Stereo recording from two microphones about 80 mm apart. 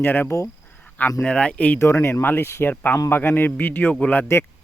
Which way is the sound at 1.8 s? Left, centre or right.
Left.